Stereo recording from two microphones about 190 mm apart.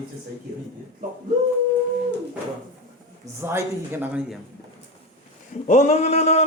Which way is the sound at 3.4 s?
10° right (ahead or behind).